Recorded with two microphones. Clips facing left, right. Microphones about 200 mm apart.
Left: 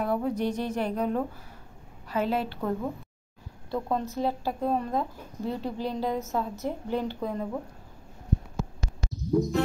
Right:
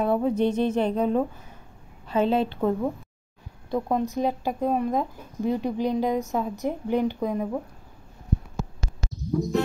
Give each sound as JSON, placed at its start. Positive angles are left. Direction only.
{"t": 0.0, "sound": "mantra", "side_deg": -25}
{"t": 3.7, "sound": "speech", "side_deg": -15}
{"t": 9.1, "sound": "a sound", "side_deg": 0}